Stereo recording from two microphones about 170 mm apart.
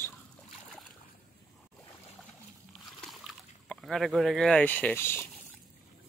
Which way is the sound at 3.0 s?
Centre (ahead or behind).